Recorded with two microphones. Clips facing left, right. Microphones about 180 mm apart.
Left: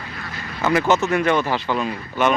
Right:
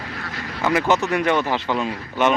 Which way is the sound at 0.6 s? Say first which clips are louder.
Left 1 dB; 10° right (ahead or behind).